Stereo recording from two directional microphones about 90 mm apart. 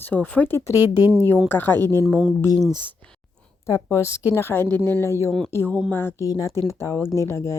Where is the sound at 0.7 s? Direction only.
45° left (ahead or behind).